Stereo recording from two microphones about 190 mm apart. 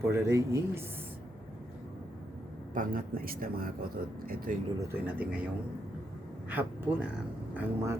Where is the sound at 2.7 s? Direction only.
50° right (ahead or behind).